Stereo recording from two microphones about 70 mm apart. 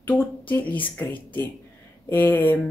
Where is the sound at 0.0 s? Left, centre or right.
Left.